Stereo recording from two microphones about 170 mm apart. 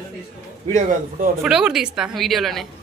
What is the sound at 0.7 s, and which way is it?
Speech, 45° right (ahead or behind).